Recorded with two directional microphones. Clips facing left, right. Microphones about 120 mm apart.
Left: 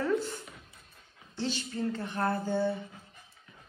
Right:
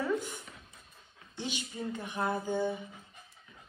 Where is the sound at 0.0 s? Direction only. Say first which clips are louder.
Left 3 dB; 15° right (ahead or behind).